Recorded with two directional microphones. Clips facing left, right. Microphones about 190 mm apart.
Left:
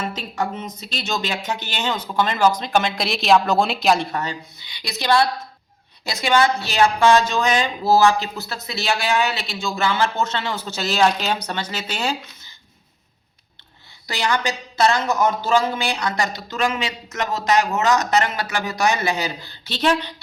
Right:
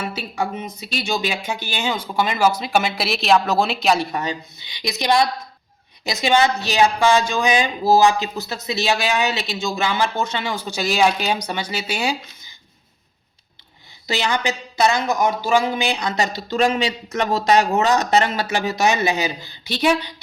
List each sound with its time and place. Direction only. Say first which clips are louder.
0.0 s a woman's voice: even; 10° right (ahead or behind)
14.1 s speech: right 1 dB; 20° right (ahead or behind)